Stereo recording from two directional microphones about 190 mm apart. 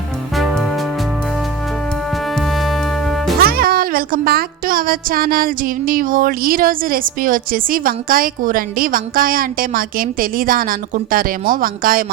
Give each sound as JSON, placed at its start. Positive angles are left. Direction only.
{"t": 0.3, "sound": "music", "side_deg": 0}
{"t": 2.3, "sound": "music", "side_deg": 0}
{"t": 3.4, "sound": "speech", "side_deg": -50}